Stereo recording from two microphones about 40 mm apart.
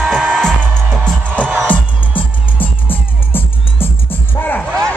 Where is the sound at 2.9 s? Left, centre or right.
Left.